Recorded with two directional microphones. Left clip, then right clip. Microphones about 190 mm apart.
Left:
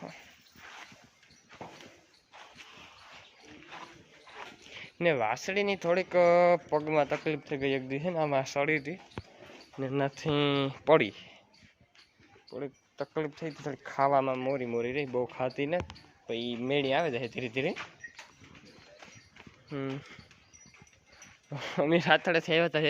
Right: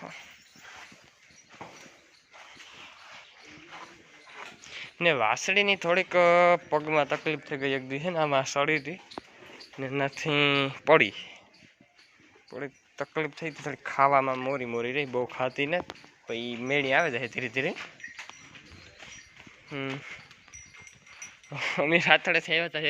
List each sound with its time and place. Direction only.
0.0 s dog: 20° left (ahead or behind)
4.6 s speech: 20° left (ahead or behind)
12.5 s speech: 5° left (ahead or behind)
19.7 s speech: 10° left (ahead or behind)
21.5 s speech: 20° left (ahead or behind); by 22.9 s 40° left (ahead or behind)